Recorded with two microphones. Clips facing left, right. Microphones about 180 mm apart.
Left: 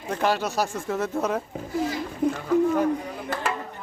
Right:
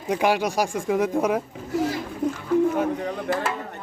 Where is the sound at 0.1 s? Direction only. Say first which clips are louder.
Right 3 dB; 10° right (ahead or behind).